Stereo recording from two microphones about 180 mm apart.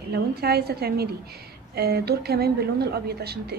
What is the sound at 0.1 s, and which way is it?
A woman's voice, 60° right (ahead or behind).